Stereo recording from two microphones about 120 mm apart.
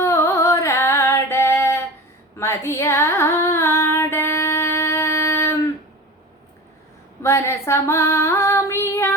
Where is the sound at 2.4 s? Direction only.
20° left (ahead or behind).